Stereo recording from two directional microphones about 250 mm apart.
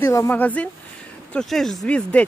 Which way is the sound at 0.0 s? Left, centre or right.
Centre.